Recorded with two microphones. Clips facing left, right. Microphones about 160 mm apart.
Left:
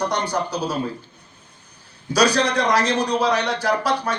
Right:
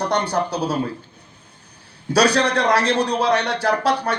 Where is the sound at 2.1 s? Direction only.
60° right (ahead or behind).